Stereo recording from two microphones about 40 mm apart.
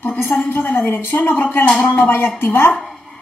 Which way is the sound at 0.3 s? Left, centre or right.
Left.